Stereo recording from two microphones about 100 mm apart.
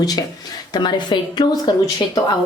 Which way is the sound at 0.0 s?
40° left (ahead or behind).